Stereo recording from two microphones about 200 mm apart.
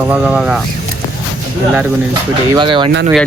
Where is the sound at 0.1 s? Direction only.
5° right (ahead or behind).